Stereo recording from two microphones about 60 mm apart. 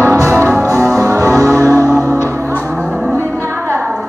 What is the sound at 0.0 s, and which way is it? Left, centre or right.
Music, right.